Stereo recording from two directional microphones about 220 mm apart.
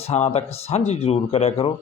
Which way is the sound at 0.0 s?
30° left (ahead or behind).